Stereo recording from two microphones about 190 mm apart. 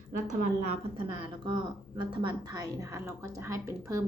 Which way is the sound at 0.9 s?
25° right (ahead or behind).